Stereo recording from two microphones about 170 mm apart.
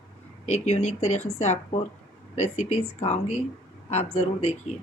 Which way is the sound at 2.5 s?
40° left (ahead or behind).